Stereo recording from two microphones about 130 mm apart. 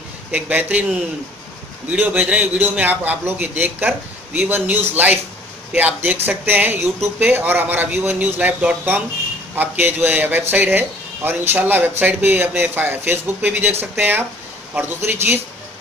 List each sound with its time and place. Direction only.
0.3 s a man's voice: 10° right (ahead or behind)
1.9 s a man's voice: 10° right (ahead or behind)